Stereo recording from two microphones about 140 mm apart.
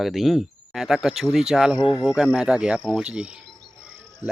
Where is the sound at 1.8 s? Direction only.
30° left (ahead or behind).